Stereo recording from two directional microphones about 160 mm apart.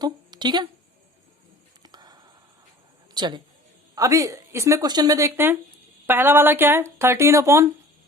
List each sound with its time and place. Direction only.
0.0 s speech: 25° right (ahead or behind)
1.8 s a sound: 25° right (ahead or behind)
3.2 s a woman's voice: 30° right (ahead or behind)